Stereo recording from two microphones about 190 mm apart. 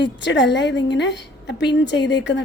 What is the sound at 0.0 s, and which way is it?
A woman's voice, 65° left (ahead or behind).